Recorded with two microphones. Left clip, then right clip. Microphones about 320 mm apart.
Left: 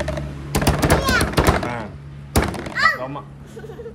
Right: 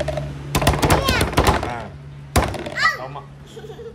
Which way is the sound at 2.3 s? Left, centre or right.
Centre.